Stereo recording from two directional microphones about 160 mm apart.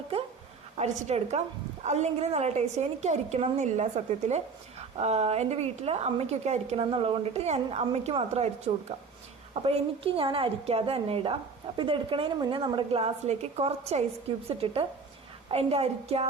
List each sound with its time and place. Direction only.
0.8 s a woman's voice: 45° right (ahead or behind)